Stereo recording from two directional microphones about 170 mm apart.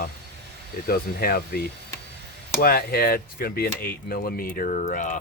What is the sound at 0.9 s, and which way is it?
Speech, 60° left (ahead or behind).